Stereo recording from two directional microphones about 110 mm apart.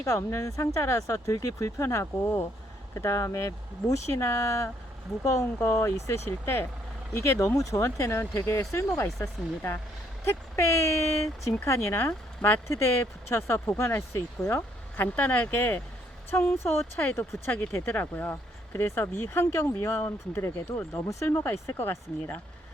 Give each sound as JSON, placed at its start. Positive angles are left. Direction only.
{"t": 0.0, "sound": "speech", "side_deg": 25}
{"t": 10.5, "sound": "speech", "side_deg": 25}